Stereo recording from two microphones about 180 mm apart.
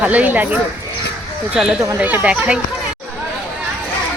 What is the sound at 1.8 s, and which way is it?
Speech, 10° right (ahead or behind).